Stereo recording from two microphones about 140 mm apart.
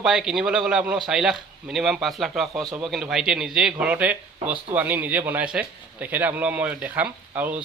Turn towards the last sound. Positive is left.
turn(degrees=-10)  # may be behind; listen again after turning